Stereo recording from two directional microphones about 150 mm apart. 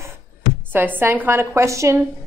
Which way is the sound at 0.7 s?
15° right (ahead or behind).